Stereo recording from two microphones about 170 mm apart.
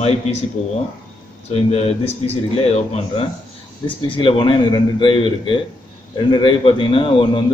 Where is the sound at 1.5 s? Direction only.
35° left (ahead or behind).